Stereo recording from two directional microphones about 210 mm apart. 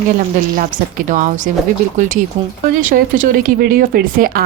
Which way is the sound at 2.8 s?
40° right (ahead or behind).